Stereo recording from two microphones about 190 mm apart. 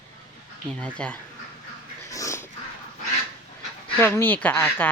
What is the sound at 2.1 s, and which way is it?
Dog, 15° left (ahead or behind).